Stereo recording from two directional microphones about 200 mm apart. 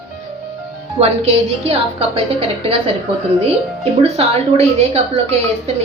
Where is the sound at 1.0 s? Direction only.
30° right (ahead or behind).